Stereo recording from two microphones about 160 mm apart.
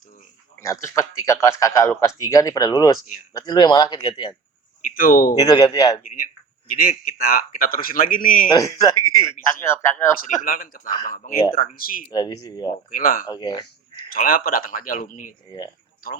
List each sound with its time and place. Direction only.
0.6 s speech: 20° left (ahead or behind)
4.9 s speech: 60° left (ahead or behind)
5.4 s speech: 25° left (ahead or behind)
6.7 s speech: 65° left (ahead or behind)
8.4 s speech: 25° left (ahead or behind)
10.4 s speech: 60° left (ahead or behind)
12.0 s speech: 25° left (ahead or behind)
12.9 s speech: 60° left (ahead or behind)
13.2 s speech: 25° left (ahead or behind)
14.1 s speech: 65° left (ahead or behind)